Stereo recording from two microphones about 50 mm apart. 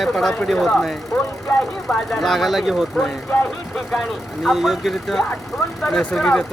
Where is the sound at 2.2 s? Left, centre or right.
Centre.